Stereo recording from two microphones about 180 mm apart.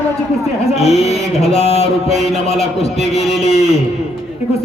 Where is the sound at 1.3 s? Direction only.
35° left (ahead or behind).